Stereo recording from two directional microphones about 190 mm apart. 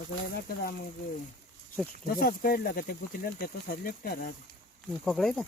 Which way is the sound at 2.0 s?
50° left (ahead or behind).